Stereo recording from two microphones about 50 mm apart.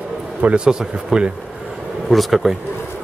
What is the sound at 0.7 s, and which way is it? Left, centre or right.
Speech, centre.